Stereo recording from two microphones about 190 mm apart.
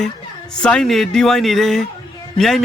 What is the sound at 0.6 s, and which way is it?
A man's voice, 5° left (ahead or behind).